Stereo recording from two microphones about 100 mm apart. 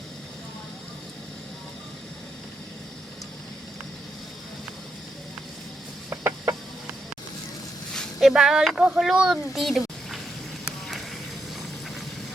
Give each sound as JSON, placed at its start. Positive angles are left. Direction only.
{"t": 6.1, "sound": "chicken", "side_deg": -30}
{"t": 8.2, "sound": "speech", "side_deg": -5}